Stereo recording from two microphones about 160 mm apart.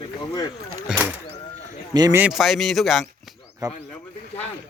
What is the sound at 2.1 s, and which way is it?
Speech, 5° right (ahead or behind).